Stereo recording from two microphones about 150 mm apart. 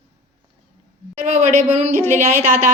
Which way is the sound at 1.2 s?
50° right (ahead or behind).